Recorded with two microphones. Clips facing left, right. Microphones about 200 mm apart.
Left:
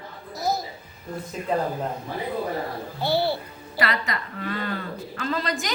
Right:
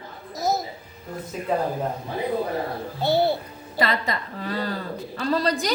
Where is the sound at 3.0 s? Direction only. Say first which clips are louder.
Right 3 dB; 20° right (ahead or behind).